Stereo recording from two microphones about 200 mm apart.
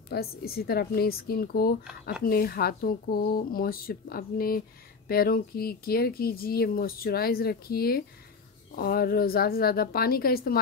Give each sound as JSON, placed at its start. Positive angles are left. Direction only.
{"t": 0.1, "sound": "speech", "side_deg": 50}